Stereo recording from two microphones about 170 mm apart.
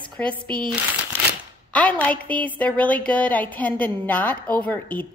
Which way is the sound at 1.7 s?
10° left (ahead or behind).